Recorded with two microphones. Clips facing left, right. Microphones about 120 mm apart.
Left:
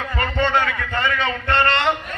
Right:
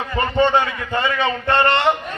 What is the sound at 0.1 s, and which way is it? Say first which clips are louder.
A man's voice: right 4 dB; 20° right (ahead or behind).